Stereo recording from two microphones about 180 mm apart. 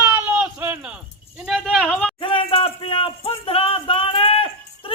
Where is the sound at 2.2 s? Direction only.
30° left (ahead or behind).